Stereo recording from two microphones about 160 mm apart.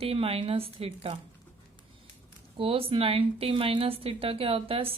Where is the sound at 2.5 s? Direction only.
35° right (ahead or behind).